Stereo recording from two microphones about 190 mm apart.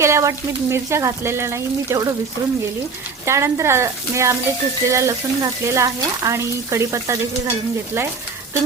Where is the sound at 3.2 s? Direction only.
15° right (ahead or behind).